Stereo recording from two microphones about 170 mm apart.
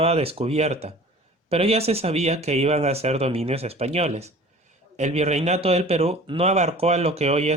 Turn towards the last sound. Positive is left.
turn(degrees=-40)  # may be behind; listen again after turning